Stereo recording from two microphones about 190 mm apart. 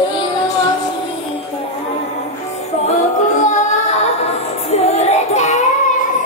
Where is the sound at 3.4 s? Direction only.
35° left (ahead or behind).